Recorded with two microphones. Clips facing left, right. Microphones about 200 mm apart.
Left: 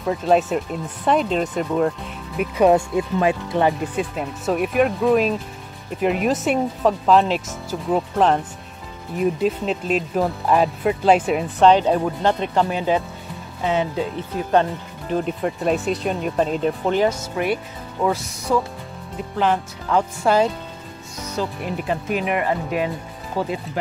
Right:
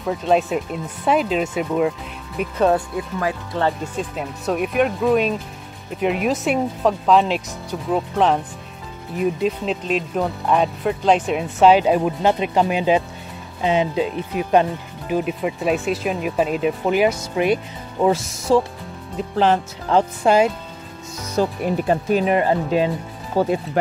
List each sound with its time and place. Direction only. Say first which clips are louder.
0.0 s speech: left 1 dB; centre (ahead or behind); by 3.7 s 20° left (ahead or behind)
3.8 s speech: left 2 dB; centre (ahead or behind); by 18.2 s 20° right (ahead or behind)
18.5 s speech: right 4 dB; 30° right (ahead or behind)
20.2 s speech: right 2 dB; 10° right (ahead or behind)
21.4 s speech: right 6 dB; 45° right (ahead or behind)
23.4 s speech: right 7 dB; 50° right (ahead or behind)